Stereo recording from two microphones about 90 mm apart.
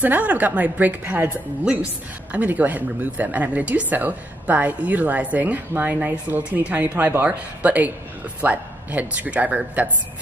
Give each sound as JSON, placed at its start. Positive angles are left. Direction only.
{"t": 0.0, "sound": "speech", "side_deg": -20}